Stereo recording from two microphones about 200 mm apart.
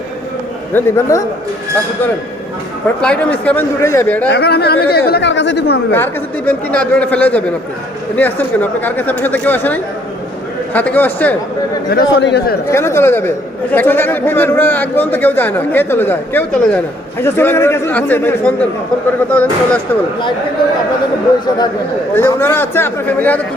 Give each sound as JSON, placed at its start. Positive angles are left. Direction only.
{"t": 0.7, "sound": "a man's voice", "side_deg": 10}
{"t": 3.0, "sound": "a man's voice", "side_deg": 5}
{"t": 4.3, "sound": "speech", "side_deg": 55}
{"t": 5.9, "sound": "a man's voice", "side_deg": 10}
{"t": 11.9, "sound": "speech", "side_deg": 55}
{"t": 12.7, "sound": "a man's voice", "side_deg": 15}
{"t": 22.1, "sound": "a man's voice", "side_deg": 10}